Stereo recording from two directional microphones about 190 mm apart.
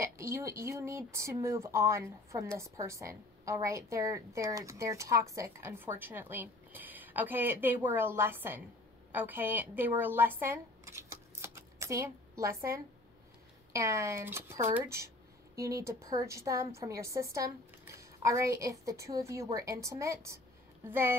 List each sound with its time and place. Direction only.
0.0 s speech: 15° right (ahead or behind)